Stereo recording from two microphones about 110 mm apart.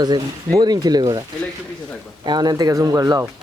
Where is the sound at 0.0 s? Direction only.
40° right (ahead or behind).